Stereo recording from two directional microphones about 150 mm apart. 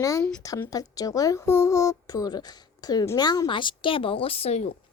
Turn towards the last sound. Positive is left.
turn(degrees=45)  # may be behind; listen again after turning